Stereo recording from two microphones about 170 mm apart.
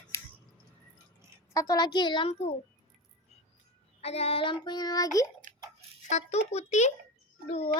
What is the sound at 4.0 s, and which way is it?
Child singing, 35° left (ahead or behind).